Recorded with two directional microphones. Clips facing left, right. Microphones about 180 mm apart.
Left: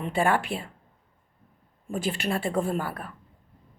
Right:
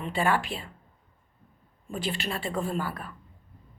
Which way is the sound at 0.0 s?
55° left (ahead or behind).